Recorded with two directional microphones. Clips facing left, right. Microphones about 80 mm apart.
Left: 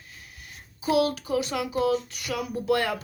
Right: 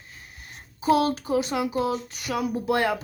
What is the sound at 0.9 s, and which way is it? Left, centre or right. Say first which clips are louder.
Speech: right 2 dB; right.